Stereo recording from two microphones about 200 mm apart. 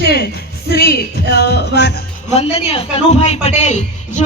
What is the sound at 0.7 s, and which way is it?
Music, 55° left (ahead or behind).